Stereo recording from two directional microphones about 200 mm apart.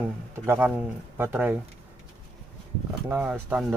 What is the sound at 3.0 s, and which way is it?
Speech, 10° right (ahead or behind).